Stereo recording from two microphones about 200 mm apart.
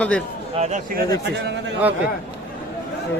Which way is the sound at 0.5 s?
35° right (ahead or behind).